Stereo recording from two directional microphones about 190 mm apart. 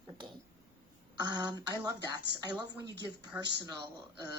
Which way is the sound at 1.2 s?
20° right (ahead or behind).